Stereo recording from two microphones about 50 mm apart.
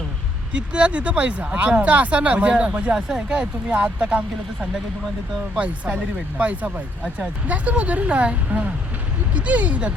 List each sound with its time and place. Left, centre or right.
0.7 s speech: right
2.9 s speech: centre
5.5 s speech: right